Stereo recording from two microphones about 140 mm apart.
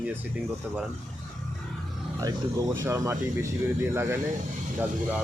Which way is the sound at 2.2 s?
25° right (ahead or behind).